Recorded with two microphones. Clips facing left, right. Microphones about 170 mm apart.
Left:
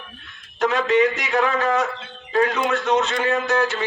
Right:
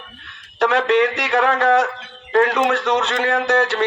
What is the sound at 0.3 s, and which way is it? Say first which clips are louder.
A man's voice: right 3 dB; 65° right (ahead or behind).